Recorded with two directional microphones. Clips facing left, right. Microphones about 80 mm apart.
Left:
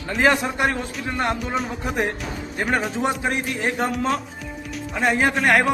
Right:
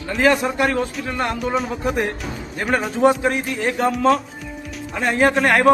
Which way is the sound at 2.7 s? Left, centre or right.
Centre.